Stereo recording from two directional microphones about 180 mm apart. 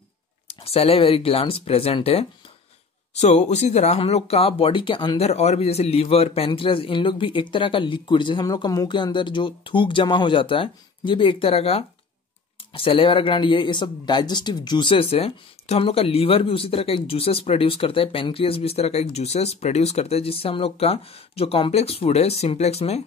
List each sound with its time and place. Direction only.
0.5 s speech: 35° left (ahead or behind)